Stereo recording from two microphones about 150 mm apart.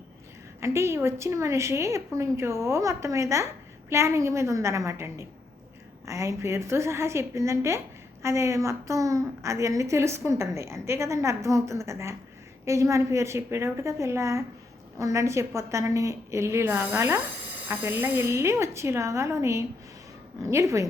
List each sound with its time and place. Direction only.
0.6 s a woman's voice: 20° right (ahead or behind)